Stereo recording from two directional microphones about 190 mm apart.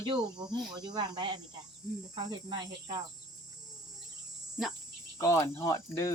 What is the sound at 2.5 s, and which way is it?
Speech, 25° right (ahead or behind).